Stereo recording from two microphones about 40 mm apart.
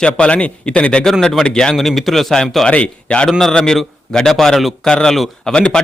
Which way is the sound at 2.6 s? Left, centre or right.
Left.